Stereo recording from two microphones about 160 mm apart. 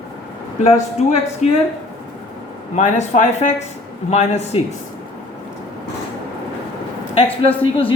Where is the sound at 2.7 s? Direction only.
50° left (ahead or behind).